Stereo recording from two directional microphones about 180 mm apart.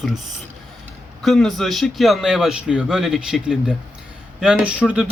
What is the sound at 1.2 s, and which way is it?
Speech, centre (ahead or behind).